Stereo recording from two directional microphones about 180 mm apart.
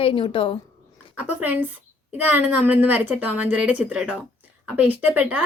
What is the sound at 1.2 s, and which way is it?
Speech, 10° right (ahead or behind).